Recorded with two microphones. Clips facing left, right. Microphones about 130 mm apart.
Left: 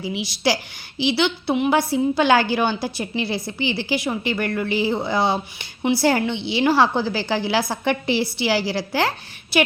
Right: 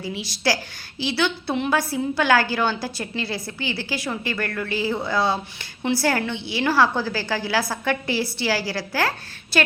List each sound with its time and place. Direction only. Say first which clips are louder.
0.0 s a woman's voice: left 3 dB; 15° left (ahead or behind)